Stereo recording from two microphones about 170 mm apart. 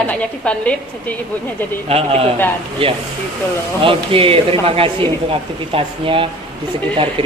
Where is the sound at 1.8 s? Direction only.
35° right (ahead or behind).